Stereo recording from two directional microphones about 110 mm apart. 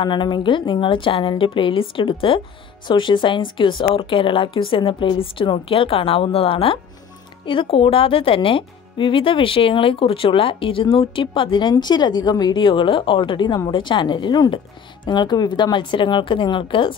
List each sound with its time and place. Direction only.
0.0 s a woman's voice: 45° left (ahead or behind)